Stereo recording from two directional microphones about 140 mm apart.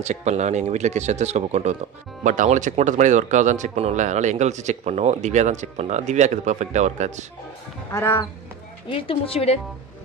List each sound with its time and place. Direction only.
0.0 s speech: 55° right (ahead or behind)
7.9 s speech: 20° left (ahead or behind)
8.8 s a woman's voice: 40° left (ahead or behind)